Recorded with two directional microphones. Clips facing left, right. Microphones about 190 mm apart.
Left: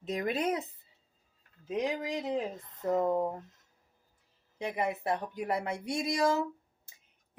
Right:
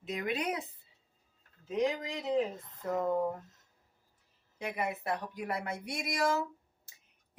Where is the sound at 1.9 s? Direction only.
30° left (ahead or behind).